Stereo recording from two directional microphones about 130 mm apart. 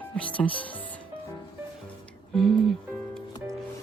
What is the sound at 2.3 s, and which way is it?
Speech, centre (ahead or behind).